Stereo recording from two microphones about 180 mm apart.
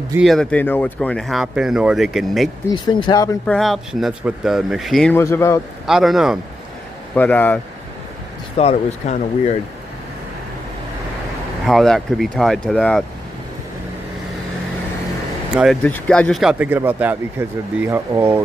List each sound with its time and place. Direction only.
0.2 s speech: centre (ahead or behind)
2.7 s speech: 25° left (ahead or behind)
3.4 s speech: centre (ahead or behind)
5.1 s a man's voice: 15° left (ahead or behind)
5.9 s speech: centre (ahead or behind)
7.2 s a man's voice: 10° left (ahead or behind)
8.5 s speech: 35° left (ahead or behind)
11.6 s speech: centre (ahead or behind)
15.5 s speech: 5° right (ahead or behind)
15.8 s speech: 10° left (ahead or behind); by 18.4 s 15° right (ahead or behind)